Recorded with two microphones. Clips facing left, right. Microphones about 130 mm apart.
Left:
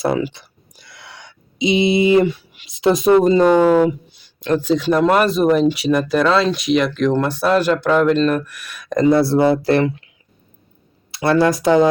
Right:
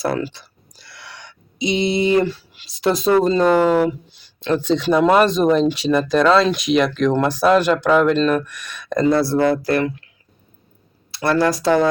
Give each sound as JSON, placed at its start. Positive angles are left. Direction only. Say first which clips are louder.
{"t": 0.0, "sound": "a sound", "louder": "left 3 dB", "side_deg": 15}
{"t": 2.8, "sound": "speech", "louder": "left 3 dB", "side_deg": 20}
{"t": 11.1, "sound": "speech", "louder": "left 2 dB", "side_deg": 20}